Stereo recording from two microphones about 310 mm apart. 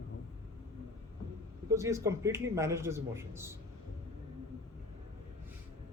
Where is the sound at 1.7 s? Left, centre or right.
Centre.